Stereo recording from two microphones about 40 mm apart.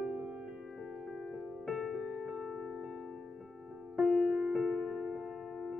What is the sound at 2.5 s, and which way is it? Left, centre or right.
Music, centre.